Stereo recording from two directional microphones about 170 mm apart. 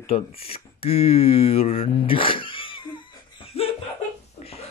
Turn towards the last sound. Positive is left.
turn(degrees=35)  # may be behind; listen again after turning